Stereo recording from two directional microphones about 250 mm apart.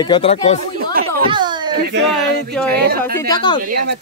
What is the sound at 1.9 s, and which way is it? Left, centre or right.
Speech, right.